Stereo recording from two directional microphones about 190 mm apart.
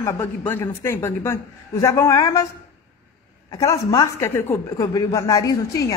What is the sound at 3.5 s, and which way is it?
Speech, 15° left (ahead or behind).